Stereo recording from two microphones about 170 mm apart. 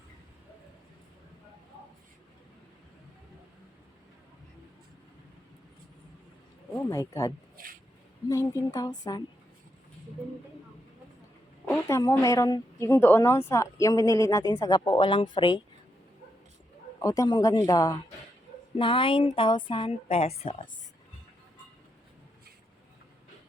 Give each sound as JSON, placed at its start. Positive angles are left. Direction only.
{"t": 6.7, "sound": "a woman's voice", "side_deg": 20}
{"t": 7.5, "sound": "a sound", "side_deg": -55}
{"t": 8.3, "sound": "a woman's voice", "side_deg": 20}
{"t": 11.6, "sound": "a woman's voice", "side_deg": 15}
{"t": 17.0, "sound": "a woman's voice", "side_deg": 20}